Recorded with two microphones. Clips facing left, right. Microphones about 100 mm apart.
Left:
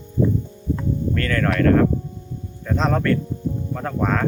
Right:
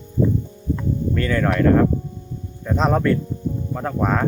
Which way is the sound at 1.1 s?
15° right (ahead or behind).